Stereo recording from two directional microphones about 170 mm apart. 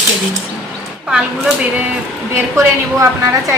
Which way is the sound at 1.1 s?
5° right (ahead or behind).